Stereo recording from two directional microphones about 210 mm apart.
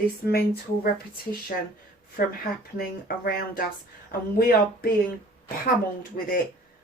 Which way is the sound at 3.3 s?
45° left (ahead or behind).